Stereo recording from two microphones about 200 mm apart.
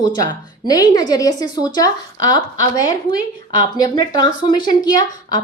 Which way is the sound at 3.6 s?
20° left (ahead or behind).